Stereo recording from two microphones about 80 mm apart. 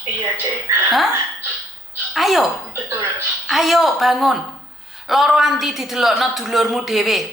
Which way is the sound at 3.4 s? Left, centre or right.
Centre.